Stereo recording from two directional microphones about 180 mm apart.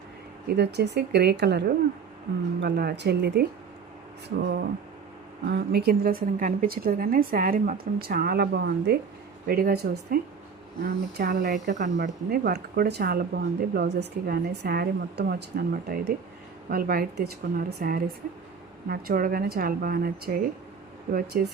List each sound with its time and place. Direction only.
0.4 s speech: 65° right (ahead or behind)
5.5 s a woman's voice: 60° right (ahead or behind)